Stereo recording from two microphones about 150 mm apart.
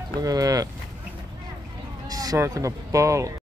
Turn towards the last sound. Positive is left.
turn(degrees=-20)  # may be behind; listen again after turning